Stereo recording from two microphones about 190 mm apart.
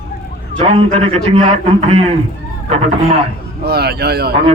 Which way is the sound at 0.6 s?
30° right (ahead or behind).